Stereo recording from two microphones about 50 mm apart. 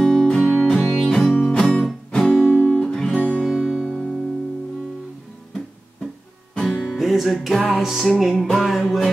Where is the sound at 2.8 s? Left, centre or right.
Centre.